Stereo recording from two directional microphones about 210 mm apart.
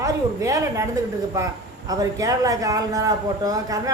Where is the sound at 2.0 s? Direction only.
15° right (ahead or behind).